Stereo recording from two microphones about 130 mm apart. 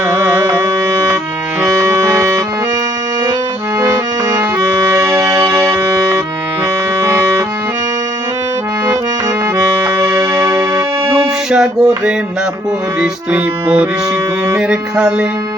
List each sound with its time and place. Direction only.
0.1 s music: 20° right (ahead or behind)
3.8 s music: 20° right (ahead or behind)
9.6 s music: 25° right (ahead or behind)
11.5 s music: 5° right (ahead or behind)